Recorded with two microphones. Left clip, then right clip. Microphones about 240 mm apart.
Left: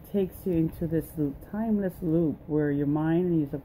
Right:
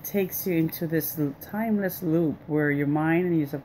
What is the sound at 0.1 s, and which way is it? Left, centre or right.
Speech, right.